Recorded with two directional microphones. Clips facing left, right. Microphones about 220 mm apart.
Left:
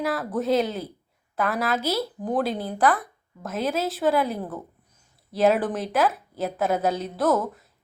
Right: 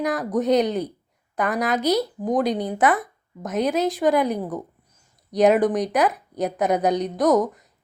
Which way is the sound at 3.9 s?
15° right (ahead or behind).